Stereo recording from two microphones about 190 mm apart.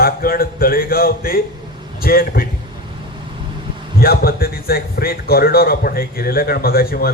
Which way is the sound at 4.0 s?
55° left (ahead or behind).